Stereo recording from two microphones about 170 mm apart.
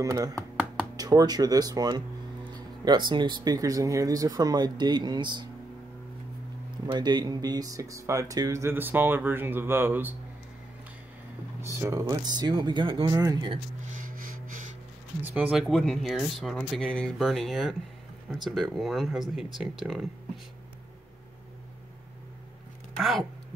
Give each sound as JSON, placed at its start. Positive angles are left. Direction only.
{"t": 0.0, "sound": "speech", "side_deg": -20}
{"t": 6.9, "sound": "speech", "side_deg": -25}
{"t": 11.6, "sound": "speech", "side_deg": -15}
{"t": 13.9, "sound": "gasp", "side_deg": -55}
{"t": 15.3, "sound": "speech", "side_deg": -5}
{"t": 22.9, "sound": "speech", "side_deg": 0}